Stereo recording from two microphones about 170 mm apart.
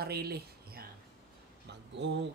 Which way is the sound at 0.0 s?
65° right (ahead or behind).